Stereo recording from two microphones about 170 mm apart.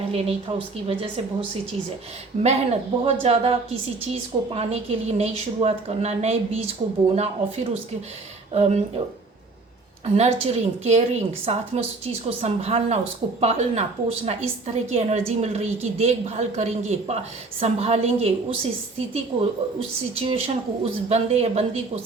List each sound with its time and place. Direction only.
0.1 s a woman's voice: 35° right (ahead or behind)
2.3 s a woman's voice: 40° right (ahead or behind)
10.2 s a woman's voice: 40° right (ahead or behind)